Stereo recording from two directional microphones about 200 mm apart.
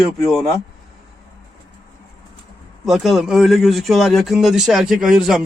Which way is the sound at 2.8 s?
Centre (ahead or behind).